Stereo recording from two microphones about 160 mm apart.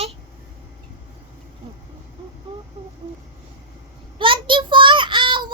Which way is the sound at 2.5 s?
35° right (ahead or behind).